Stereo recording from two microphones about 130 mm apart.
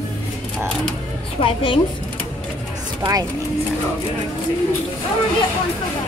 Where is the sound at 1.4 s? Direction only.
45° left (ahead or behind).